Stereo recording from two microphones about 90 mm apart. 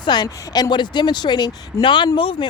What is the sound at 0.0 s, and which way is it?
Speech, 50° left (ahead or behind).